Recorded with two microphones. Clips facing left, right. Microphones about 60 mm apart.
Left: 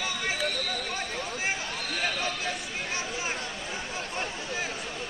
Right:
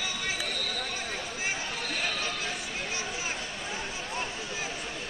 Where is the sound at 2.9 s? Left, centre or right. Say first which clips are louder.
Left 4 dB; left.